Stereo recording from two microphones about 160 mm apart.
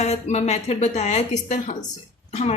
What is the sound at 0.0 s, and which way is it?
A woman's voice, 45° left (ahead or behind).